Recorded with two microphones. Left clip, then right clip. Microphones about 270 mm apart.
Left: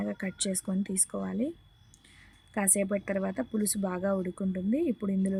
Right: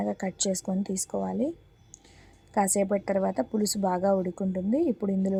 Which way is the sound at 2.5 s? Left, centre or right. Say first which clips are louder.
Right 5 dB; centre.